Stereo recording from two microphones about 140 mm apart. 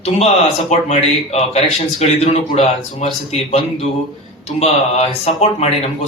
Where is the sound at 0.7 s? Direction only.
50° left (ahead or behind).